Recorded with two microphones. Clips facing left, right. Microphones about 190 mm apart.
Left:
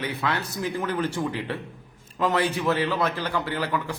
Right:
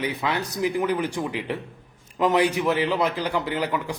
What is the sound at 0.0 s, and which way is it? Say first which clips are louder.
A man's voice: right 2 dB; 15° right (ahead or behind).